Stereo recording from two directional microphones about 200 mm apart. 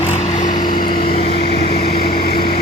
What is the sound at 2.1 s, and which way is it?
Vehicle, 50° left (ahead or behind).